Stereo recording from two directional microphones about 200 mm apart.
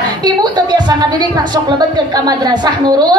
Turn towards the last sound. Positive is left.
turn(degrees=-20)  # may be behind; listen again after turning